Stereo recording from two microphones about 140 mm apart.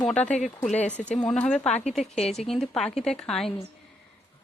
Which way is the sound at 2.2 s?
50° left (ahead or behind).